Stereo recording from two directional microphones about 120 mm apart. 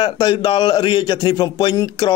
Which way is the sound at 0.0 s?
40° left (ahead or behind).